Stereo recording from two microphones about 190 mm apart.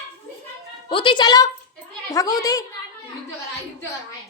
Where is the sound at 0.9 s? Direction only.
25° left (ahead or behind).